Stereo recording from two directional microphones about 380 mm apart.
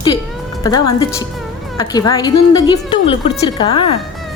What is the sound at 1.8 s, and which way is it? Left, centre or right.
A woman's voice, centre.